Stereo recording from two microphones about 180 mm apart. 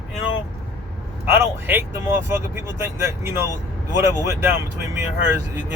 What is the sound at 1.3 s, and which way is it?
Speech, 10° right (ahead or behind).